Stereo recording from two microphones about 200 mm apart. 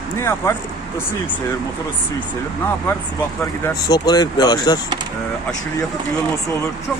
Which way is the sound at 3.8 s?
20° left (ahead or behind).